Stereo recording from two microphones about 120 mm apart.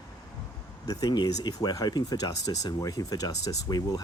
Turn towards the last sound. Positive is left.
turn(degrees=35)  # may be behind; listen again after turning